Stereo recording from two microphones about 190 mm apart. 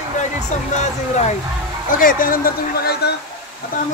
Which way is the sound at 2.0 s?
50° left (ahead or behind).